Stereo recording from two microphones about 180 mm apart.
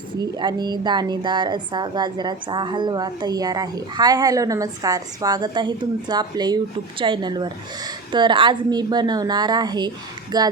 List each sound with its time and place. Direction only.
0.2 s a woman's voice: 25° right (ahead or behind)